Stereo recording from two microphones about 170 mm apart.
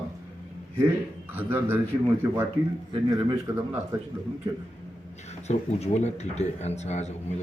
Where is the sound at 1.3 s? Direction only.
10° right (ahead or behind).